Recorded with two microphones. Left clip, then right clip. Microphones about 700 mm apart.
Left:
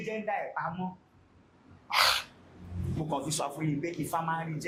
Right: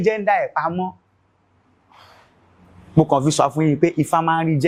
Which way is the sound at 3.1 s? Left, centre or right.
Right.